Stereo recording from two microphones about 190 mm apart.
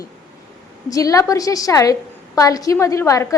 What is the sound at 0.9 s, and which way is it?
A woman's voice, 20° left (ahead or behind).